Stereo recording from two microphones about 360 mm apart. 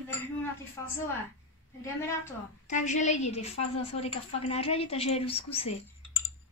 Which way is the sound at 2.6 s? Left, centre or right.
Centre.